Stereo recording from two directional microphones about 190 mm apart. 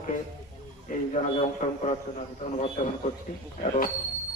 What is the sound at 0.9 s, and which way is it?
A man's voice, 35° left (ahead or behind).